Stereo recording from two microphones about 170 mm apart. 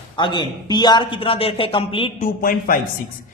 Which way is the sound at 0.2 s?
25° left (ahead or behind).